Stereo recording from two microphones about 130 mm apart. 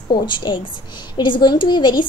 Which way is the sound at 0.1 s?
35° left (ahead or behind).